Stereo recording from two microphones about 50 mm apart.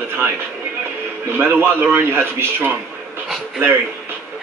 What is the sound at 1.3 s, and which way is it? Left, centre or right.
A man's voice, right.